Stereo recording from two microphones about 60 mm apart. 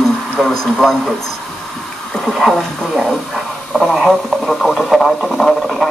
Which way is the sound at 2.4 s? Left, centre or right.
Centre.